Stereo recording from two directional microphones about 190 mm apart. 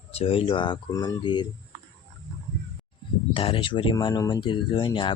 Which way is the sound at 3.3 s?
30° left (ahead or behind).